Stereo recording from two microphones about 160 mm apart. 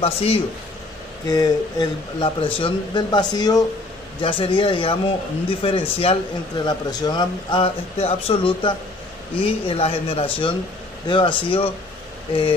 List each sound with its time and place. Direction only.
0.0 s speech: 40° left (ahead or behind)
1.2 s speech: 25° left (ahead or behind)